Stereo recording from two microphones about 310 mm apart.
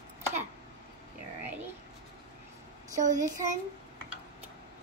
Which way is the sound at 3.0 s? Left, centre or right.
Right.